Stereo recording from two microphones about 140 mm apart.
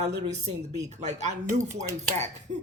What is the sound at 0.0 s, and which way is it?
Speech, 55° right (ahead or behind).